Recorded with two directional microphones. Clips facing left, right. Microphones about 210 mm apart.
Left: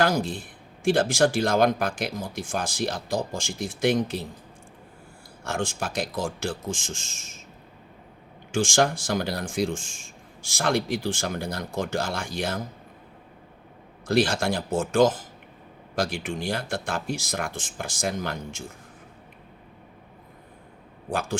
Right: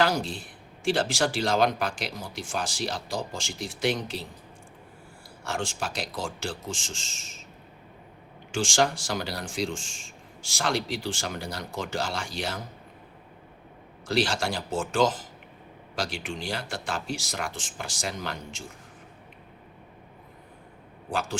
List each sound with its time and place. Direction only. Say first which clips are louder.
0.0 s speech: left 2 dB; 50° left (ahead or behind)
5.5 s speech: left 3 dB; 55° left (ahead or behind)
8.5 s speech: left 3 dB; 50° left (ahead or behind)
14.1 s speech: left 4 dB; 55° left (ahead or behind)
21.1 s speech: left 2 dB; 55° left (ahead or behind)